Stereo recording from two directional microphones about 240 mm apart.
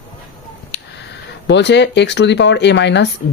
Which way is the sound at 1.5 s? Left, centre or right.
Left.